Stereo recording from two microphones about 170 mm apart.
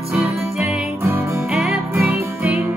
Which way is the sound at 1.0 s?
15° right (ahead or behind).